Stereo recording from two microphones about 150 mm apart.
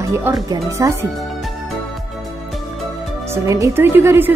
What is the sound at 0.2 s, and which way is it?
Speech, 20° right (ahead or behind).